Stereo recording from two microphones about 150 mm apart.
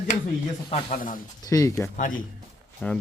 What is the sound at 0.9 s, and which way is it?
Speech, 65° left (ahead or behind).